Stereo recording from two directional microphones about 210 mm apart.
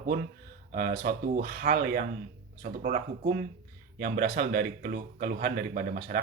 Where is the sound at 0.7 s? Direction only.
45° right (ahead or behind).